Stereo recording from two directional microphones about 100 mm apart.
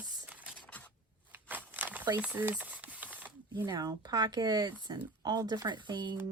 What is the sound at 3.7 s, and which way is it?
Speech, 40° right (ahead or behind).